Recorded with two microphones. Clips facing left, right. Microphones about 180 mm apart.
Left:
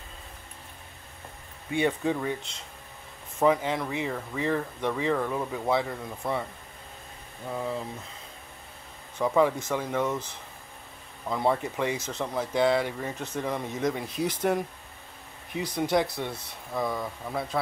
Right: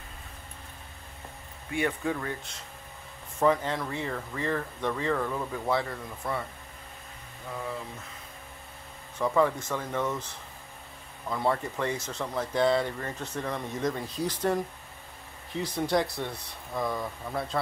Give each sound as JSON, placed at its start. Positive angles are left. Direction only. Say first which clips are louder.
{"t": 1.7, "sound": "speech", "louder": "left 3 dB", "side_deg": 20}
{"t": 3.3, "sound": "speech", "louder": "left 1 dB", "side_deg": 15}
{"t": 9.2, "sound": "speech", "louder": "left 2 dB", "side_deg": 10}
{"t": 11.2, "sound": "speech", "louder": "left 2 dB", "side_deg": 15}
{"t": 14.0, "sound": "speech", "louder": "left 2 dB", "side_deg": 20}
{"t": 16.3, "sound": "speech", "louder": "left 2 dB", "side_deg": 5}